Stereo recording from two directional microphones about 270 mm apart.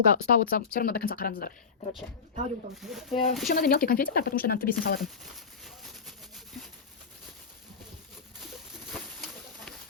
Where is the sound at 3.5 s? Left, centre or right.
Left.